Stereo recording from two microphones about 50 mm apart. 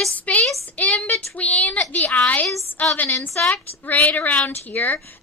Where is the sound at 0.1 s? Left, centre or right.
Left.